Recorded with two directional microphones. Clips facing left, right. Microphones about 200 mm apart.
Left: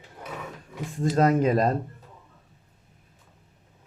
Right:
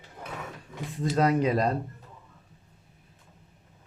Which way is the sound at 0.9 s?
45° left (ahead or behind).